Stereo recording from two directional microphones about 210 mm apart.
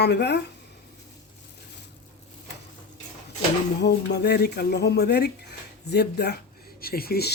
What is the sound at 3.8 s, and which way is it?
Speech, 55° left (ahead or behind).